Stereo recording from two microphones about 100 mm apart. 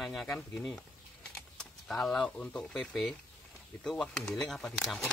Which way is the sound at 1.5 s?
5° left (ahead or behind).